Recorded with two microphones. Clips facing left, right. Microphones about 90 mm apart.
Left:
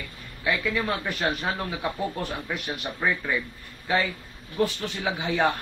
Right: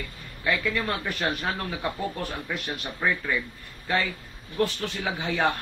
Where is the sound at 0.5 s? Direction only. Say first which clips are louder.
Left 1 dB; 5° left (ahead or behind).